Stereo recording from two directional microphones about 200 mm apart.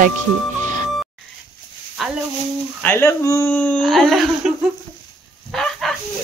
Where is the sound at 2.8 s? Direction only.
10° left (ahead or behind).